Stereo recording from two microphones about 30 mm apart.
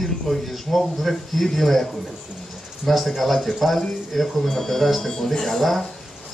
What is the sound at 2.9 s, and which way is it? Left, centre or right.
Speech, centre.